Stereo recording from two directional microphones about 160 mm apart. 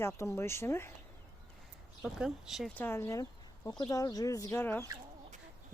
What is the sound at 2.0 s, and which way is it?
Speech, centre (ahead or behind).